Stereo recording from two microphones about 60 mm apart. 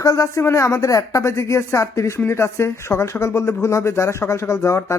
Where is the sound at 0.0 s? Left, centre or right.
Left.